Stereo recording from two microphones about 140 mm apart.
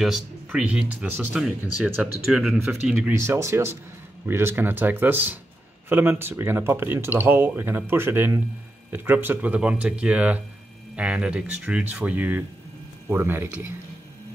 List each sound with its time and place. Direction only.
0.5 s speech: 10° right (ahead or behind)
2.3 s speech: centre (ahead or behind)
3.1 s speech: 20° right (ahead or behind)